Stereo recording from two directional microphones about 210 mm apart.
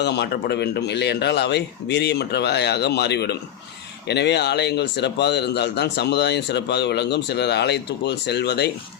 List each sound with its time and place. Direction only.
0.0 s speech: 55° left (ahead or behind)